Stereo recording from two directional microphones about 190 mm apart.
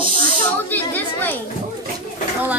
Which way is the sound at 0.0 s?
40° left (ahead or behind).